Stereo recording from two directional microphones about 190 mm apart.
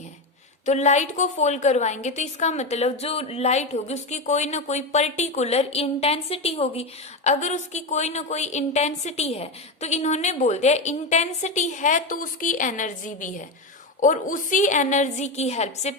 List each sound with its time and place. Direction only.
0.6 s a woman's voice: 35° left (ahead or behind)